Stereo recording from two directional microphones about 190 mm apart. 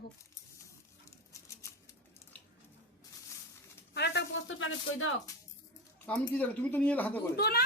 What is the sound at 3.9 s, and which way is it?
Speech, 65° left (ahead or behind).